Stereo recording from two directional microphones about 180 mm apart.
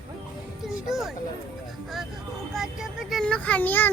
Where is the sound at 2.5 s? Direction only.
Centre (ahead or behind).